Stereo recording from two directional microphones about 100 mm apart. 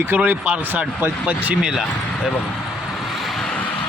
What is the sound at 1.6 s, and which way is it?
Speech, 5° right (ahead or behind).